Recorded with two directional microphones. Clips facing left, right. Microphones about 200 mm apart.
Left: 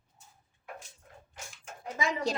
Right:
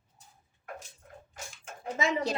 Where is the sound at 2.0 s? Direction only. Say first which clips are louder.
Right 2 dB; 25° right (ahead or behind).